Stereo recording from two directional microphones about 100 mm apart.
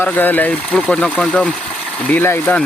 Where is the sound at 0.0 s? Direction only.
20° left (ahead or behind).